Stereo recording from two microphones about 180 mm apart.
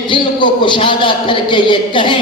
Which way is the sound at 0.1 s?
25° left (ahead or behind).